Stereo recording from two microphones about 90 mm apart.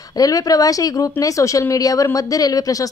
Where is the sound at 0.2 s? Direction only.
45° left (ahead or behind).